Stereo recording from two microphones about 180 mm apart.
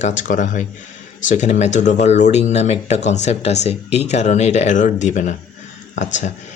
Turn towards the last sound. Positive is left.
turn(degrees=40)  # may be behind; listen again after turning